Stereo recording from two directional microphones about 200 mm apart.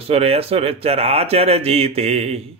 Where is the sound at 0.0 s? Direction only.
30° right (ahead or behind).